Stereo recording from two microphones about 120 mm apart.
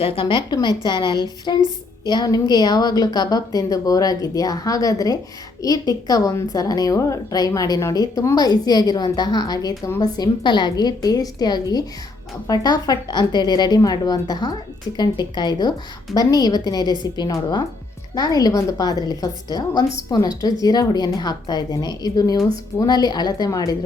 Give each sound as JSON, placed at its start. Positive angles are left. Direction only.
{"t": 0.0, "sound": "a woman's voice", "side_deg": 45}